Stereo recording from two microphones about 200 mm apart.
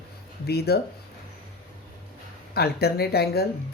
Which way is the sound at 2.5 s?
50° left (ahead or behind).